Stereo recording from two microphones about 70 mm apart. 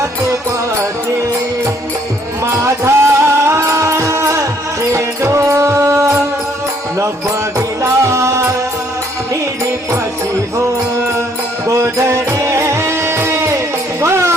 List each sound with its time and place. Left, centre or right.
2.5 s music: right
7.8 s music: right
11.7 s music: right